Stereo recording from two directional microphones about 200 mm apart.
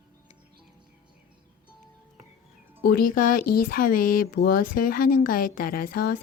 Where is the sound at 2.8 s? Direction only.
50° left (ahead or behind).